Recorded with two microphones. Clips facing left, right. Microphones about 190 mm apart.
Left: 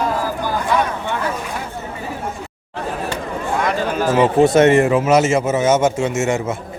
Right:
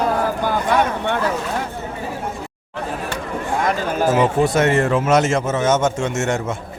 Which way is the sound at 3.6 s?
45° right (ahead or behind).